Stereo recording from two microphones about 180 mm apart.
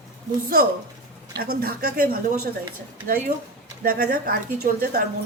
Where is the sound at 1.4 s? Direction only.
55° right (ahead or behind).